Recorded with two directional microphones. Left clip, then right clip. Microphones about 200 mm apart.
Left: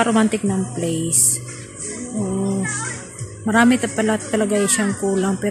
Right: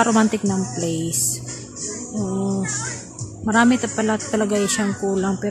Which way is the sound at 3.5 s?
Centre (ahead or behind).